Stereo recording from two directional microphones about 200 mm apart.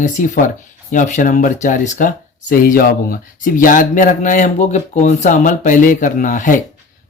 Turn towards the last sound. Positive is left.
turn(degrees=40)  # may be behind; listen again after turning